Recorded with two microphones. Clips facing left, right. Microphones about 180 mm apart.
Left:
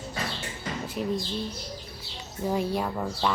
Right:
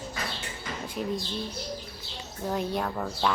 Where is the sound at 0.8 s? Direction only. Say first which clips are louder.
Left 2 dB; 5° left (ahead or behind).